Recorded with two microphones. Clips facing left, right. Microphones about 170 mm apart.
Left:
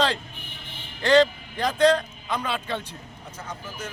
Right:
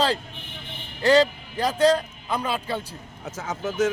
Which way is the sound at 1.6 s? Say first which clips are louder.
Even; 10° right (ahead or behind).